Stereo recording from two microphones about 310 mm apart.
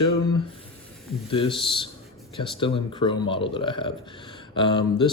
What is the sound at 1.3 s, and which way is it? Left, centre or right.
Speech, centre.